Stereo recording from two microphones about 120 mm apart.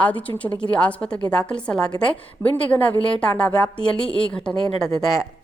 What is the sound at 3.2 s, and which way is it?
A woman's voice, 10° left (ahead or behind).